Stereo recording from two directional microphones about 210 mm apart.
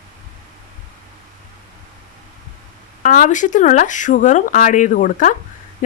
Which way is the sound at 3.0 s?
40° left (ahead or behind).